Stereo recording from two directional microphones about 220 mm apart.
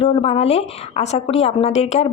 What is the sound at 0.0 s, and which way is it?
A woman's voice, 25° left (ahead or behind).